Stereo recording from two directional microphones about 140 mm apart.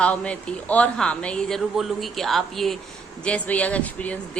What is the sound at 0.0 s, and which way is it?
Speech, 10° left (ahead or behind).